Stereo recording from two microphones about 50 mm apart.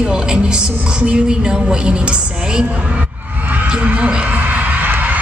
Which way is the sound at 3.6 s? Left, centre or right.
Right.